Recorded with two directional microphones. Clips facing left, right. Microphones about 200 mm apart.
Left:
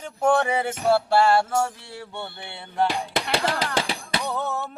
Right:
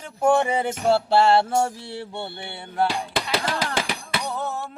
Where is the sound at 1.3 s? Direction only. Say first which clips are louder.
Right 2 dB; 25° right (ahead or behind).